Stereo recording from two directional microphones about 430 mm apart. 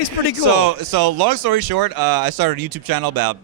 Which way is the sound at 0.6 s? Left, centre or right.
Right.